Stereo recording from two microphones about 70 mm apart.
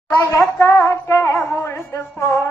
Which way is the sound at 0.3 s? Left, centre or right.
Left.